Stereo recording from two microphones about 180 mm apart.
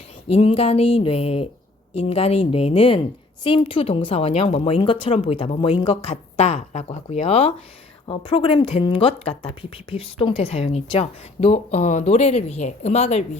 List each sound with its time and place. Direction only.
0.3 s speech: 35° left (ahead or behind)